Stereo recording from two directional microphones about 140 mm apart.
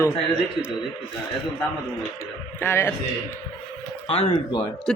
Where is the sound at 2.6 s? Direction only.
15° left (ahead or behind).